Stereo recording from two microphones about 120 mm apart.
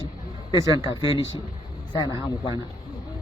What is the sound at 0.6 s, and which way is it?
Speech, 30° right (ahead or behind).